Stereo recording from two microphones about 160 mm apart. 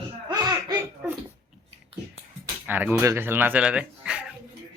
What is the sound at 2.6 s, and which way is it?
Speech, 10° right (ahead or behind).